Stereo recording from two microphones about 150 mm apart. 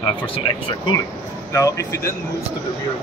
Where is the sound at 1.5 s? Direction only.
20° left (ahead or behind).